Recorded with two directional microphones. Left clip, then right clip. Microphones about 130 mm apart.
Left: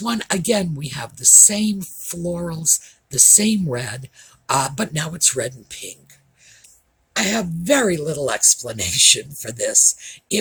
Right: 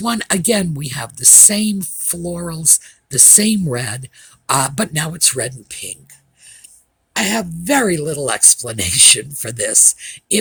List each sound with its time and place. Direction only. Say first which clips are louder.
0.0 s speech: right 4 dB; 40° right (ahead or behind)
7.1 s speech: right 2 dB; 50° right (ahead or behind)